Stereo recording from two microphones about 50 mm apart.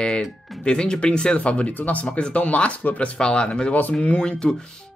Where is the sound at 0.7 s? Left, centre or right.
Centre.